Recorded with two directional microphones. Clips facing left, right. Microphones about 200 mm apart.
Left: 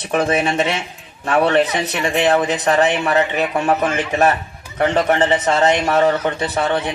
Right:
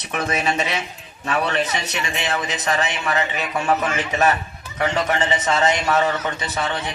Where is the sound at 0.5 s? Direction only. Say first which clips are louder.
Left 5 dB; 55° left (ahead or behind).